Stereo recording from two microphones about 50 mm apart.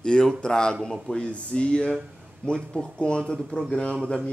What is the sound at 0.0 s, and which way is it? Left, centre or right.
A man's voice, centre.